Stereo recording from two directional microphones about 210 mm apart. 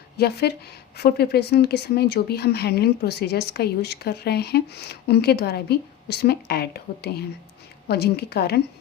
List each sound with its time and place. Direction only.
0.2 s speech: 50° left (ahead or behind)